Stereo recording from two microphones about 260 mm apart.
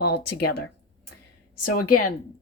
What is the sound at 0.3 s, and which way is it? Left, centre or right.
Speech, left.